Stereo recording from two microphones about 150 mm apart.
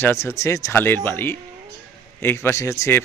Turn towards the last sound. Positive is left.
turn(degrees=20)  # may be behind; listen again after turning